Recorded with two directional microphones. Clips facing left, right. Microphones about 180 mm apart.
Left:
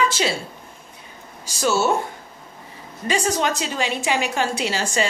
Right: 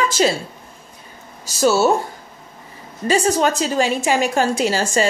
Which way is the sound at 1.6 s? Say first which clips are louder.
Right 5 dB; 35° right (ahead or behind).